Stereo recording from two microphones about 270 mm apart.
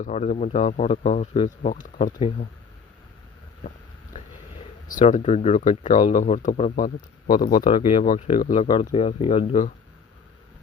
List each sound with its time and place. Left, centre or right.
0.0 s speech: left
3.6 s boat: left
4.9 s speech: left
8.6 s speech: centre